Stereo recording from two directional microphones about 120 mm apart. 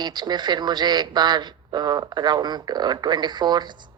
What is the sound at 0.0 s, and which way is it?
Speech, 35° right (ahead or behind).